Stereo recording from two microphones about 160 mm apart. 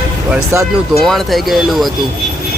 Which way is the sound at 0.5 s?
15° right (ahead or behind).